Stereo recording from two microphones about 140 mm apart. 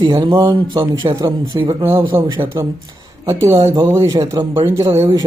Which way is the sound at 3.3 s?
20° right (ahead or behind).